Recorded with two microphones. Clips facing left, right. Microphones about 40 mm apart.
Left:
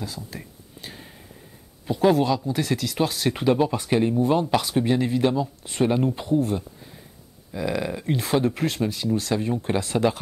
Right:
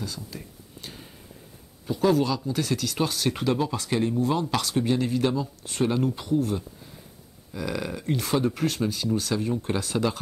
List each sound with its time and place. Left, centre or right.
0.0 s a sound: centre
1.9 s speech: left; by 3.4 s centre
3.4 s speech: left
7.5 s speech: centre